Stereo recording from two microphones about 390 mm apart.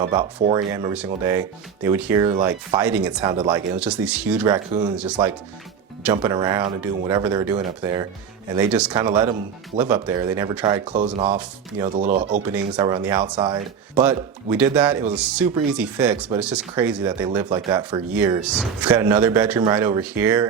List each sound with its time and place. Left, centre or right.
0.0 s speech: centre
11.9 s speech: right
12.3 s speech: centre